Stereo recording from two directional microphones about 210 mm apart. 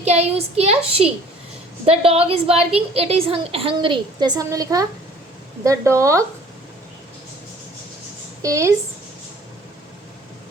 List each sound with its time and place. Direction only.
0.0 s a woman's voice: 30° right (ahead or behind); by 6.2 s 15° right (ahead or behind)
8.4 s speech: 15° right (ahead or behind)